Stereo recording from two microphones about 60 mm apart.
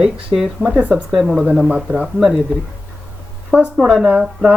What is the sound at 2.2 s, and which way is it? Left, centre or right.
Speech, centre.